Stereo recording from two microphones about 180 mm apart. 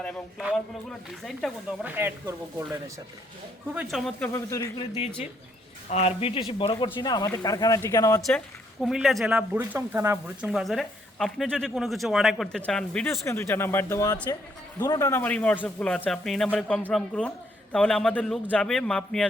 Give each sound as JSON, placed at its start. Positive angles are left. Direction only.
{"t": 0.0, "sound": "speech", "side_deg": 5}
{"t": 3.8, "sound": "speech", "side_deg": 0}
{"t": 4.4, "sound": "speech", "side_deg": 20}
{"t": 5.9, "sound": "speech", "side_deg": 35}
{"t": 8.8, "sound": "a man's voice", "side_deg": 0}